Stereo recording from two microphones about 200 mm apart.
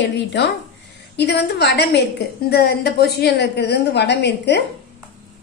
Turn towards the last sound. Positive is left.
turn(degrees=55)  # may be behind; listen again after turning